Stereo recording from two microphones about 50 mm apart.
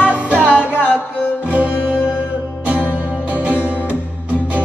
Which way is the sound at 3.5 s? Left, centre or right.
Left.